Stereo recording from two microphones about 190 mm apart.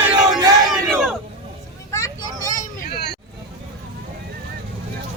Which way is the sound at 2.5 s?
50° left (ahead or behind).